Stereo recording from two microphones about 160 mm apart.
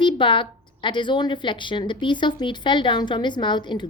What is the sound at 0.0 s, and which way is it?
A woman's voice, 30° left (ahead or behind).